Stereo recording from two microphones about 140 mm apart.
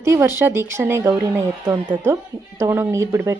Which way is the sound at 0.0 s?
20° right (ahead or behind).